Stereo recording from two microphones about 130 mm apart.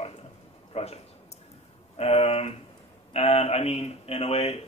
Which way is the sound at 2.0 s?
50° left (ahead or behind).